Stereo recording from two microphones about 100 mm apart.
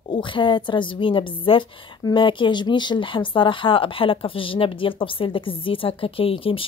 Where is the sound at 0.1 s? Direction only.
55° left (ahead or behind).